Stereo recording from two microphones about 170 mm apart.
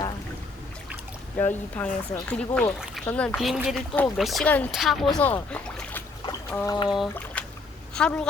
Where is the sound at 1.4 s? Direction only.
10° left (ahead or behind).